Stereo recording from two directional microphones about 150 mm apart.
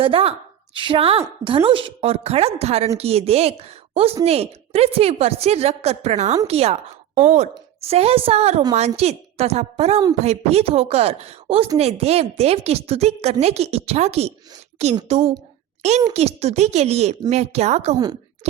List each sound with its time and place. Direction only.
0.0 s a woman's voice: 40° right (ahead or behind)
17.9 s a woman's voice: 25° right (ahead or behind)